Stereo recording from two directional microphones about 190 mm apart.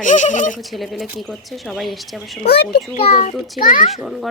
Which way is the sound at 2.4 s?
60° left (ahead or behind).